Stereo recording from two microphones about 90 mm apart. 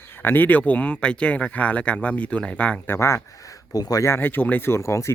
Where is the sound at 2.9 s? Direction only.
30° left (ahead or behind); by 4.0 s 45° left (ahead or behind).